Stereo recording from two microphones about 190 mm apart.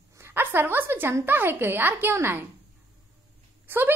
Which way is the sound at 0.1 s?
10° right (ahead or behind).